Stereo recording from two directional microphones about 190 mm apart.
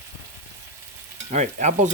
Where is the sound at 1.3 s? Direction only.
40° right (ahead or behind).